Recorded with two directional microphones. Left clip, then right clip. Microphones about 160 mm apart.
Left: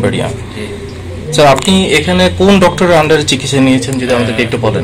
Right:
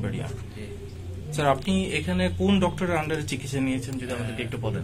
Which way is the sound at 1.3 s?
50° left (ahead or behind).